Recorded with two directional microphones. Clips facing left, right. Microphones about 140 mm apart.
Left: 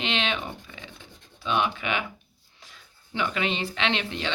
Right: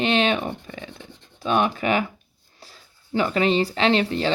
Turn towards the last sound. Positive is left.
turn(degrees=-40)  # may be behind; listen again after turning